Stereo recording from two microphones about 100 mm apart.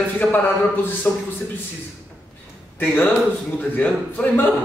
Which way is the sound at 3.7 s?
15° left (ahead or behind).